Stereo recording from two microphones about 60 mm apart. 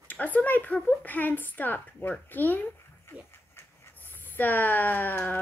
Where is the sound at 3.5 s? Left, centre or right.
Left.